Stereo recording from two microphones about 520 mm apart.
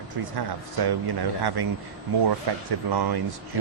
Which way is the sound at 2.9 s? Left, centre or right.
Right.